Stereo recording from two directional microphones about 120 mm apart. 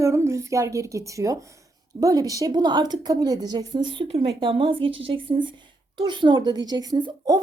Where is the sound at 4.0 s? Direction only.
50° right (ahead or behind).